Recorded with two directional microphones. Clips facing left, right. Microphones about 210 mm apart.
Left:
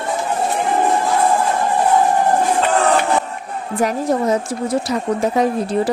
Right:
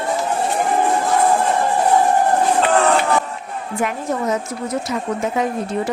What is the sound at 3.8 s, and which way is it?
Speech, 35° left (ahead or behind).